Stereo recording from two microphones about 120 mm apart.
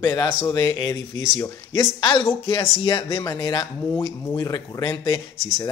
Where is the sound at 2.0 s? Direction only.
40° left (ahead or behind).